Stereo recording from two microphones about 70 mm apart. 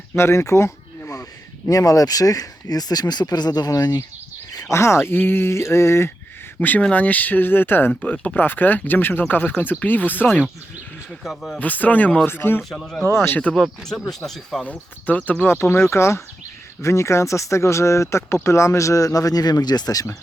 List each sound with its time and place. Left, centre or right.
0.2 s speech: left
1.7 s speech: left
4.5 s speech: left
6.6 s speech: left
8.1 s speech: centre
8.4 s speech: left
11.2 s speech: centre
11.6 s speech: left
12.7 s speech: centre
13.2 s speech: left
13.5 s speech: centre
14.6 s speech: left
15.4 s speech: left